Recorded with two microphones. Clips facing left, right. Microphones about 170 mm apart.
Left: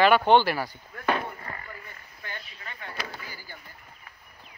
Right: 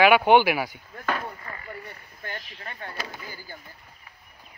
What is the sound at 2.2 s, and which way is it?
Speech, 45° right (ahead or behind).